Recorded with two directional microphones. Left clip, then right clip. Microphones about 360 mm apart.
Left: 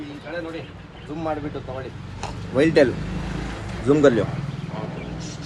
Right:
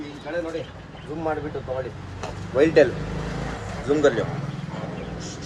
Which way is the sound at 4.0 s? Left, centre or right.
Centre.